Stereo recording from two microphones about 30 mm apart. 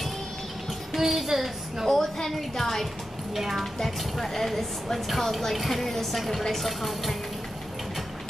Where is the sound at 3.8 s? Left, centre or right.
Centre.